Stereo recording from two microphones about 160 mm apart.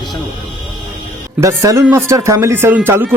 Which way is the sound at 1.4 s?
20° right (ahead or behind).